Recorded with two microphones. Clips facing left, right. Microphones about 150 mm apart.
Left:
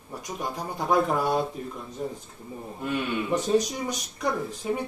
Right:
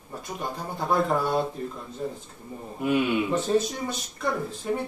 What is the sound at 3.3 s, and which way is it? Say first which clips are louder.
Speech: even; 15° left (ahead or behind).